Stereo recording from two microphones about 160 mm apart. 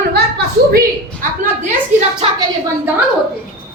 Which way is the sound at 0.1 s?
85° right.